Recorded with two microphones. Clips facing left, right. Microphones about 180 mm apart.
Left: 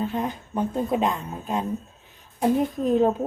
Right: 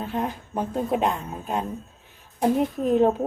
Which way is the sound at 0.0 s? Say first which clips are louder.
Left 1 dB; centre (ahead or behind).